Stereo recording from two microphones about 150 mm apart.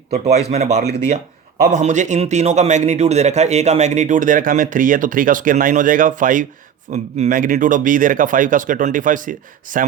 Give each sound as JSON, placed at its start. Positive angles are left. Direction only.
{"t": 0.3, "sound": "a man's voice", "side_deg": -45}